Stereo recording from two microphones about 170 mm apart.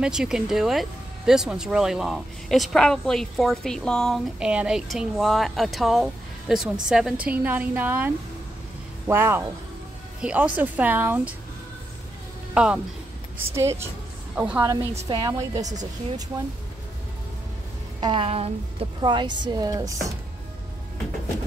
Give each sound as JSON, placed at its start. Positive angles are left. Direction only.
{"t": 0.0, "sound": "a woman's voice", "side_deg": -5}
{"t": 12.5, "sound": "speech", "side_deg": -5}
{"t": 13.6, "sound": "a woman's voice", "side_deg": -15}
{"t": 14.6, "sound": "a woman's voice", "side_deg": -15}
{"t": 18.0, "sound": "a woman's voice", "side_deg": -35}